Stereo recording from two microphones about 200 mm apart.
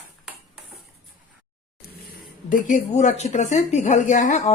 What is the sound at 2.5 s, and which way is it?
Speech, 40° left (ahead or behind).